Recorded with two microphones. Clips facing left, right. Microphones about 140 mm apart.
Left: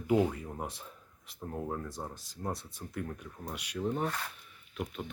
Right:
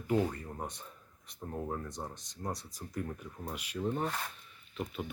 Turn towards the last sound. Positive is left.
turn(degrees=0)  # may be behind; listen again after turning